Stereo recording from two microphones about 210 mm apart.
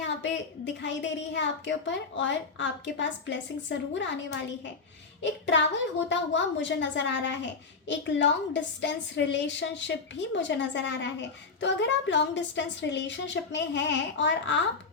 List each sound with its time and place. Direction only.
0.0 s a woman's voice: 60° left (ahead or behind)